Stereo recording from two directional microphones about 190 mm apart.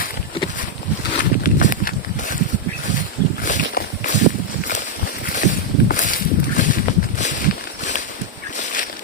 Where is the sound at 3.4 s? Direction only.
45° left (ahead or behind).